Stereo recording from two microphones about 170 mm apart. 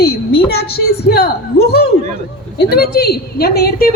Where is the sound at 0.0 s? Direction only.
65° left (ahead or behind).